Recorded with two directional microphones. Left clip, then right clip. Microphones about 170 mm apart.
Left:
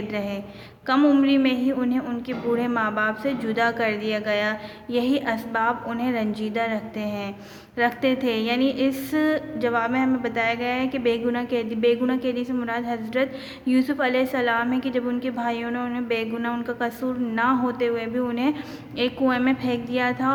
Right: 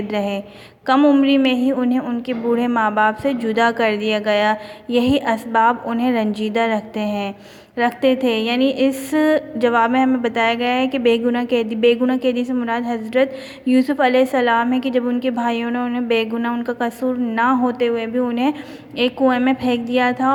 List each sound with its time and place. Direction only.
0.1 s a woman's voice: 35° right (ahead or behind)